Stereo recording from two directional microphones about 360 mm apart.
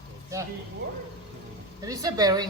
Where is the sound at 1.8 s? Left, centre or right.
Centre.